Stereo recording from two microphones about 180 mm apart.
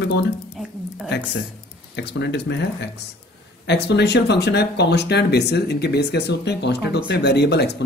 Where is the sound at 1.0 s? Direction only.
70° left (ahead or behind).